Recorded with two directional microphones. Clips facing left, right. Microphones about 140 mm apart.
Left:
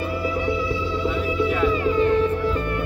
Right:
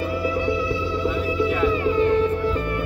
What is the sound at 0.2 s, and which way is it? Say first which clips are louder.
Music: right 1 dB; 70° right (ahead or behind).